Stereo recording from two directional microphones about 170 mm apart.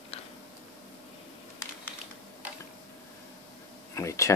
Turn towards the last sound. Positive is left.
turn(degrees=20)  # may be behind; listen again after turning